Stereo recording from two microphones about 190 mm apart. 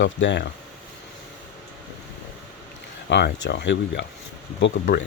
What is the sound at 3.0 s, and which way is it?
Speech, 65° left (ahead or behind).